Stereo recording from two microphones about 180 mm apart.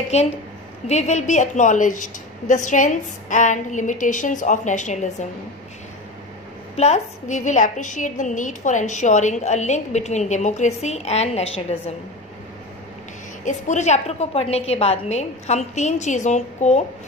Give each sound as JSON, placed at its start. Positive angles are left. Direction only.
{"t": 0.1, "sound": "a woman's voice", "side_deg": 35}
{"t": 6.8, "sound": "a woman's voice", "side_deg": 40}
{"t": 13.5, "sound": "a woman's voice", "side_deg": 40}